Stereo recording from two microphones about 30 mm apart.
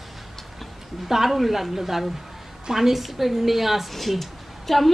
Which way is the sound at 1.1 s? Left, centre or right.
Centre.